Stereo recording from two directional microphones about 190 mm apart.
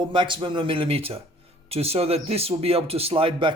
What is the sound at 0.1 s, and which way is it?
A man's voice, 25° right (ahead or behind).